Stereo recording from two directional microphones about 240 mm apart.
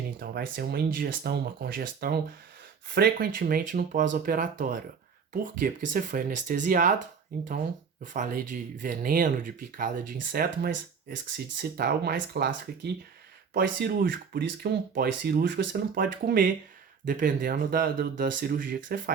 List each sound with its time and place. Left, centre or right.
0.2 s speech: right
8.0 s speech: right